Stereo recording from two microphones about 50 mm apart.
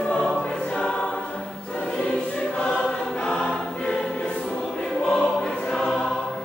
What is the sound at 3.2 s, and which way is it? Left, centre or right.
Choir, centre.